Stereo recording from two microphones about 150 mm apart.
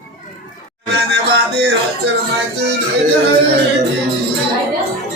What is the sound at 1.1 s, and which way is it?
Music, 90° right.